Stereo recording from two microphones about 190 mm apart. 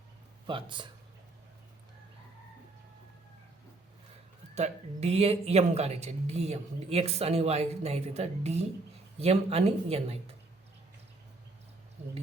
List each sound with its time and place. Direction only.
0.4 s speech: 25° right (ahead or behind)
4.5 s speech: 35° right (ahead or behind)